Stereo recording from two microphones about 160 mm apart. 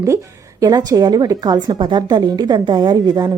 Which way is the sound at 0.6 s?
25° right (ahead or behind).